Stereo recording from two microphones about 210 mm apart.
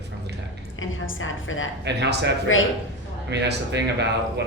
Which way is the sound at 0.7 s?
70° left (ahead or behind).